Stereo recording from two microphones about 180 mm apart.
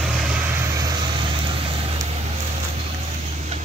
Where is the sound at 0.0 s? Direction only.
5° right (ahead or behind).